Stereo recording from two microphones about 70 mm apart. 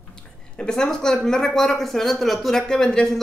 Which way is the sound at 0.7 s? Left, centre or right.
Centre.